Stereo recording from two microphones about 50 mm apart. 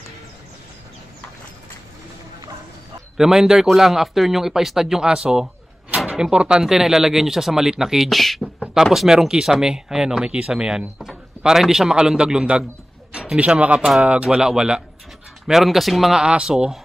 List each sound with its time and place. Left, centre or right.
3.2 s speech: centre
8.1 s speech: centre
8.7 s speech: centre
13.4 s speech: right; by 16.2 s centre
16.2 s speech: centre